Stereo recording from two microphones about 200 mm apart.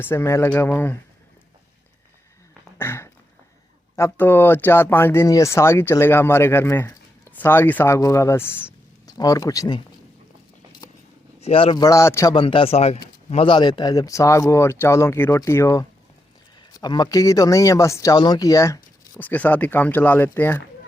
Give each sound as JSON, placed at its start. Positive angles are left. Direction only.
{"t": 0.0, "sound": "speech", "side_deg": 10}
{"t": 2.7, "sound": "a sound", "side_deg": 10}
{"t": 3.9, "sound": "speech", "side_deg": 10}
{"t": 11.3, "sound": "a man's voice", "side_deg": 30}